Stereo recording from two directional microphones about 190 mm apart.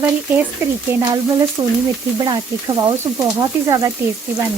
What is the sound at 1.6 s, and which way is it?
Speech, 15° right (ahead or behind).